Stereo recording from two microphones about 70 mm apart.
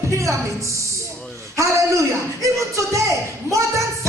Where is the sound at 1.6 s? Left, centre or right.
Right.